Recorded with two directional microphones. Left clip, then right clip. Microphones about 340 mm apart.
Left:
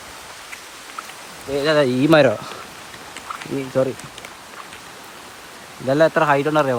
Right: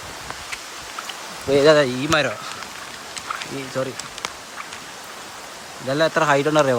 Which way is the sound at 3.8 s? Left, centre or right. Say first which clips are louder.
Left 6 dB; centre.